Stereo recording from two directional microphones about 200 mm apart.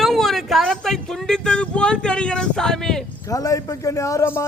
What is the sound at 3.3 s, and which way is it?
A man's voice, 15° left (ahead or behind).